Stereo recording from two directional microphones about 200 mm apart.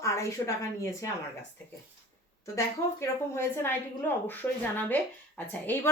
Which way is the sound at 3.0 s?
10° left (ahead or behind).